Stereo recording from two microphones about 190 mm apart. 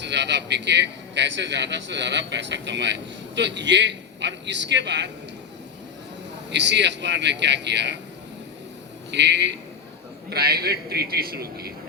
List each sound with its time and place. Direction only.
0.0 s a man's voice: 65° right (ahead or behind)
6.5 s a man's voice: 65° right (ahead or behind)
9.1 s a man's voice: 65° right (ahead or behind)